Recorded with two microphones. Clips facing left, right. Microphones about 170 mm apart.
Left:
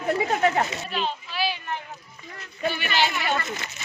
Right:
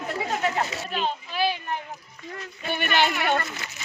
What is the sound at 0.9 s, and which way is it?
Children playing, 50° right (ahead or behind).